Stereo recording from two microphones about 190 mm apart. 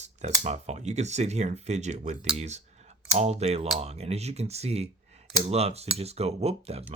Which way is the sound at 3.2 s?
35° right (ahead or behind).